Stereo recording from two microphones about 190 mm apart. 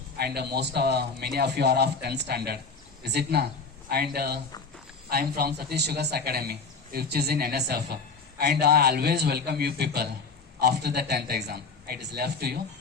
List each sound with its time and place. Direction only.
0.2 s a man's voice: 55° right (ahead or behind)